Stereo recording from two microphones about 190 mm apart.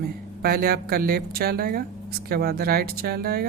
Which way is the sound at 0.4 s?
55° right (ahead or behind).